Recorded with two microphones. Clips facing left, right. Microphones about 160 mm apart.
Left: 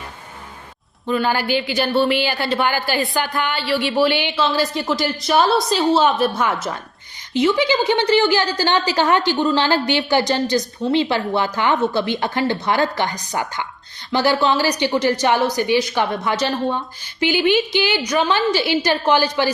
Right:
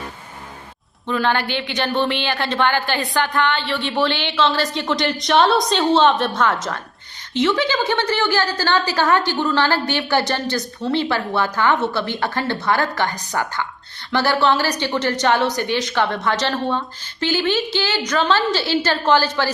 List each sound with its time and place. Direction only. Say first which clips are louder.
1.0 s a woman's voice: left 1 dB; 5° left (ahead or behind)